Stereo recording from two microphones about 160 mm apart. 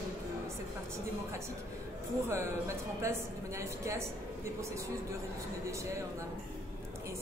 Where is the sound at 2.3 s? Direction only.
15° right (ahead or behind).